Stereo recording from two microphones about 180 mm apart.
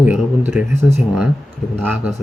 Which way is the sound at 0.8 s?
15° right (ahead or behind).